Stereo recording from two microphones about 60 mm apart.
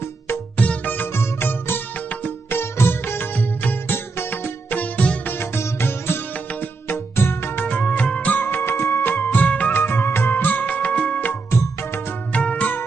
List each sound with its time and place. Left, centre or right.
0.5 s music: left
5.3 s music: left
6.3 s music: left
8.4 s music: left
11.5 s music: left
12.3 s music: left